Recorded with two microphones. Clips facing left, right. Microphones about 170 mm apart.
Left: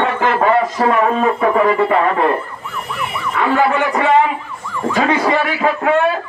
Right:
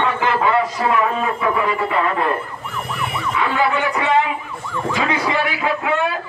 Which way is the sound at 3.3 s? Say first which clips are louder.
Left 5 dB; 50° left (ahead or behind).